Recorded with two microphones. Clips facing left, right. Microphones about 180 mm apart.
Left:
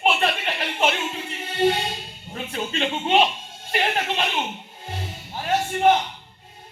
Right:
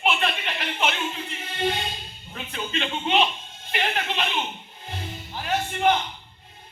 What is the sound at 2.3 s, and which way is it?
Speech, 45° left (ahead or behind).